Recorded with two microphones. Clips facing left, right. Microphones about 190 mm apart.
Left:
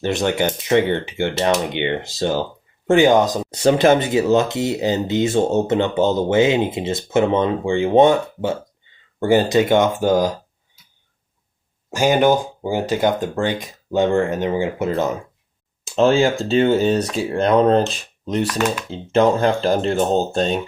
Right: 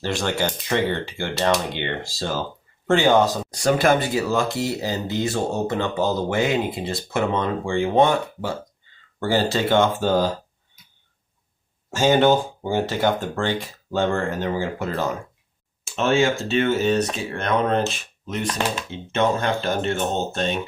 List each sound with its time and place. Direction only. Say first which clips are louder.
0.0 s speech: left 5 dB; 20° left (ahead or behind)
11.9 s speech: left 1 dB; 15° left (ahead or behind)
16.0 s speech: left 5 dB; 30° left (ahead or behind)
18.4 s speech: left 4 dB; 30° right (ahead or behind)
18.9 s speech: left 7 dB; 35° left (ahead or behind)